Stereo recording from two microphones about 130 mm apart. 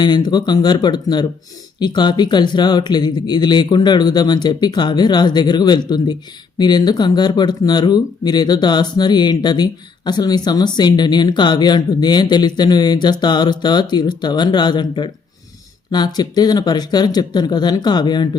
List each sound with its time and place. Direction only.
0.0 s speech: 35° left (ahead or behind)